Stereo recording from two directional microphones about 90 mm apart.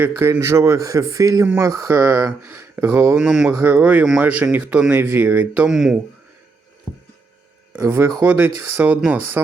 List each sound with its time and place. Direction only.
0.0 s speech: 25° right (ahead or behind)
3.2 s speech: 5° right (ahead or behind)
3.6 s speech: 20° right (ahead or behind)
4.9 s speech: 25° right (ahead or behind)
5.6 s speech: 5° right (ahead or behind)
7.7 s speech: 25° right (ahead or behind)